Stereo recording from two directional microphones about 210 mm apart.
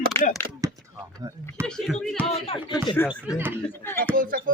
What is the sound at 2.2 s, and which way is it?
Speech, 25° left (ahead or behind).